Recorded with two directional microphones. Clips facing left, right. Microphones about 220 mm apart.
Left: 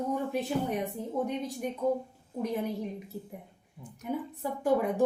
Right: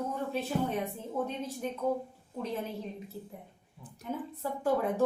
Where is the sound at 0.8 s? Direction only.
15° left (ahead or behind).